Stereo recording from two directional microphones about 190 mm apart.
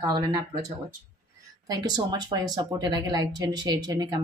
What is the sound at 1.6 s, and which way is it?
A woman's voice, 20° right (ahead or behind).